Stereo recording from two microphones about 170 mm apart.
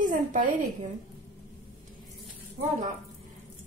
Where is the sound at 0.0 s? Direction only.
50° right (ahead or behind).